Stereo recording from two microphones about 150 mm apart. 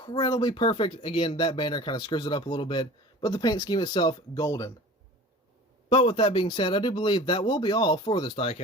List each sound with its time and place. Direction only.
0.0 s speech: 30° left (ahead or behind)
5.9 s speech: 35° left (ahead or behind)